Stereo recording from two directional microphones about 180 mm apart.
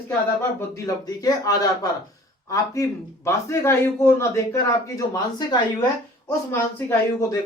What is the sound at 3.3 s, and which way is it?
A man's voice, 15° left (ahead or behind).